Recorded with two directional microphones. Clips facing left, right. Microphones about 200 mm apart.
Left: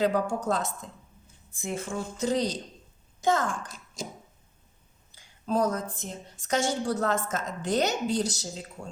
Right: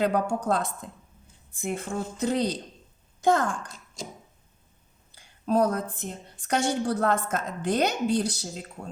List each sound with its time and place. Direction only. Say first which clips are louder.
0.0 s a woman's voice: right 1 dB; 60° right (ahead or behind)
5.1 s a woman's voice: right 3 dB; 60° right (ahead or behind)